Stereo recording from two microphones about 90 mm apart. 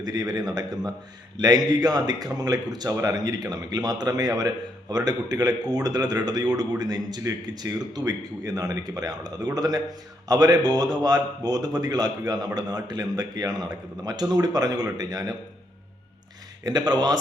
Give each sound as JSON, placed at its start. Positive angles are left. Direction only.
{"t": 0.0, "sound": "a man's voice", "side_deg": -50}
{"t": 16.6, "sound": "a man's voice", "side_deg": -50}